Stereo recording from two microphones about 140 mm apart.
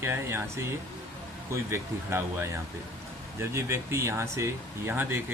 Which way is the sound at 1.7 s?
20° right (ahead or behind).